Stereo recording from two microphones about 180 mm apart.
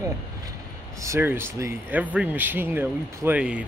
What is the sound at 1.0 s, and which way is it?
Speech, 15° right (ahead or behind).